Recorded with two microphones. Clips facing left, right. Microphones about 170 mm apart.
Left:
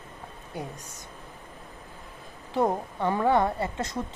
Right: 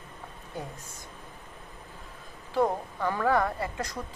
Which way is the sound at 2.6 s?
25° left (ahead or behind).